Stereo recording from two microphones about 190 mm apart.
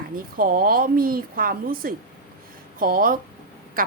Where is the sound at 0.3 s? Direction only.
50° right (ahead or behind).